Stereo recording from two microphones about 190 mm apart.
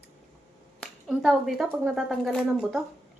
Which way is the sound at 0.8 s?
Centre (ahead or behind).